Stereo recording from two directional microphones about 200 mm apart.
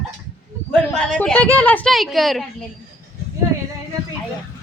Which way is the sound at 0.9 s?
5° left (ahead or behind).